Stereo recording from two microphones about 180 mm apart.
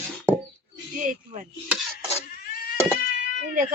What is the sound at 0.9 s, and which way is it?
Speech, 45° right (ahead or behind).